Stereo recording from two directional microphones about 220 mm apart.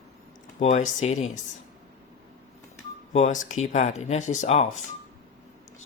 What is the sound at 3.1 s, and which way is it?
Speech, 35° left (ahead or behind).